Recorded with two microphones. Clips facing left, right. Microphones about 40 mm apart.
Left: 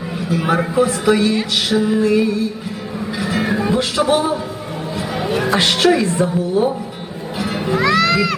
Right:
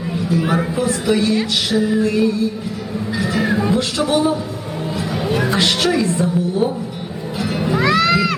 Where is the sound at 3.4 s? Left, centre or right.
Centre.